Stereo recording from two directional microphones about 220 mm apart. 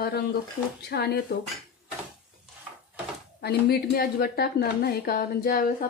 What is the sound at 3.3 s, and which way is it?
Speech, 45° left (ahead or behind).